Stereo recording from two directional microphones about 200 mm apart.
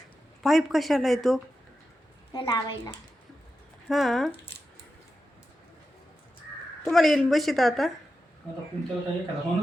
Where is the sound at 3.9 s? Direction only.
Centre (ahead or behind).